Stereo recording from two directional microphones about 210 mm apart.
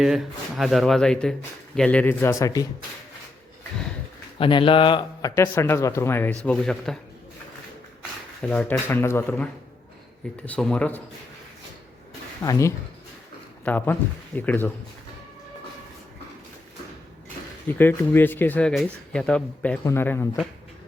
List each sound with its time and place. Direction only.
0.0 s speech: centre (ahead or behind); by 2.6 s 15° left (ahead or behind)
4.4 s speech: 25° left (ahead or behind); by 7.0 s centre (ahead or behind)
8.4 s speech: 5° left (ahead or behind)
12.4 s speech: 15° left (ahead or behind)
17.7 s speech: 10° left (ahead or behind)